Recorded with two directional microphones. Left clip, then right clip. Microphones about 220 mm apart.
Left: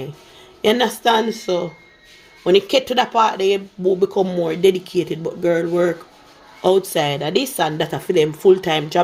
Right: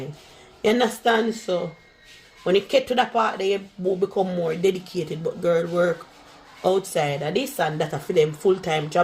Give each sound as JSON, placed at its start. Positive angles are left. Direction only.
{"t": 0.6, "sound": "speech", "side_deg": 40}